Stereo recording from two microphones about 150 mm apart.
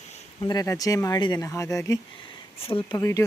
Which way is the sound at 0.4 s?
25° left (ahead or behind).